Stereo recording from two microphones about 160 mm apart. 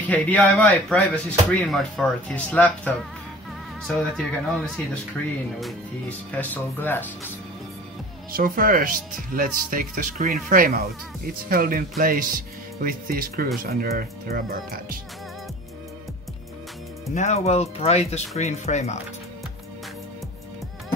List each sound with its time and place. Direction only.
0.1 s speech: 10° left (ahead or behind)
8.3 s speech: 65° right (ahead or behind)
17.1 s speech: 45° left (ahead or behind)